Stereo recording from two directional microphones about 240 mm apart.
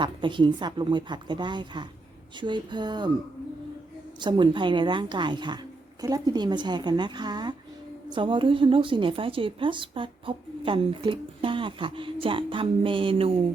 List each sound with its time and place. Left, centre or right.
0.0 s a woman's voice: centre
4.2 s a woman's voice: centre